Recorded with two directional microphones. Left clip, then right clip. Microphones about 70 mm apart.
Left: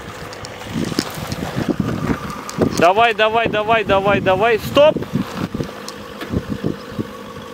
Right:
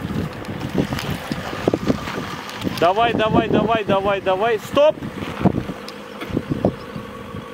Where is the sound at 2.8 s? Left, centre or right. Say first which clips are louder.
Left 3 dB; left.